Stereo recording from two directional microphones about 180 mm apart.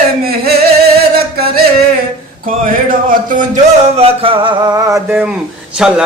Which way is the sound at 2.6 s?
45° right (ahead or behind).